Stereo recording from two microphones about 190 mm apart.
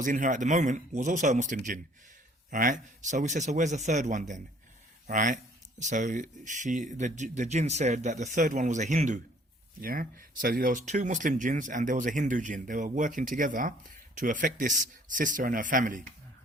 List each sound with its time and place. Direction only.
0.0 s speech: 45° right (ahead or behind)